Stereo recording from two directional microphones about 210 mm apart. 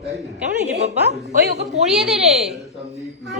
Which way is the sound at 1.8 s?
Centre (ahead or behind).